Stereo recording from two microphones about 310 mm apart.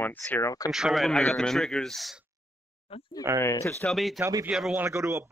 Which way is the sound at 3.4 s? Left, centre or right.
Centre.